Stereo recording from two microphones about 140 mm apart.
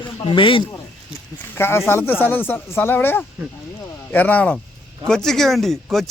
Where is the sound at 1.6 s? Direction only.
15° left (ahead or behind).